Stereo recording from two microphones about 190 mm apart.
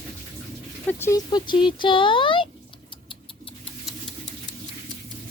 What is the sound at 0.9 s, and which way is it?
Speech, 15° left (ahead or behind).